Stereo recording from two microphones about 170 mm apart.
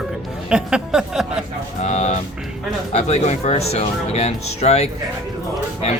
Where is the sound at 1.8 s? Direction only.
40° left (ahead or behind).